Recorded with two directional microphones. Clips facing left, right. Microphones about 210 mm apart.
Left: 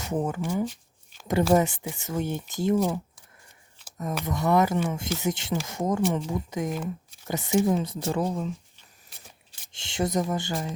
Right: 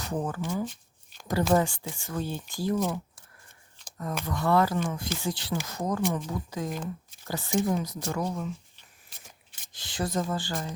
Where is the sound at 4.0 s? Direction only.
20° left (ahead or behind).